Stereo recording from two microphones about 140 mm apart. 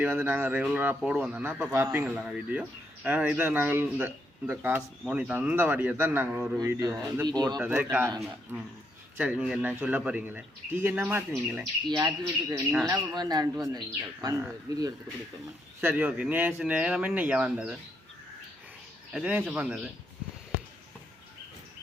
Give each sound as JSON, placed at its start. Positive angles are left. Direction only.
{"t": 0.0, "sound": "speech", "side_deg": -10}
{"t": 6.6, "sound": "speech", "side_deg": -25}
{"t": 7.6, "sound": "speech", "side_deg": -10}
{"t": 9.1, "sound": "speech", "side_deg": -10}
{"t": 11.9, "sound": "speech", "side_deg": -25}
{"t": 15.8, "sound": "speech", "side_deg": -15}
{"t": 19.1, "sound": "speech", "side_deg": -10}